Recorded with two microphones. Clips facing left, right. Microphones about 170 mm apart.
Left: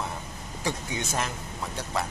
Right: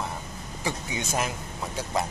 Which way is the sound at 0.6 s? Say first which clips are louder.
Even; 10° right (ahead or behind).